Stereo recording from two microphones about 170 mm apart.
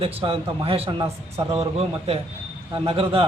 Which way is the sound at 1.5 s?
35° right (ahead or behind).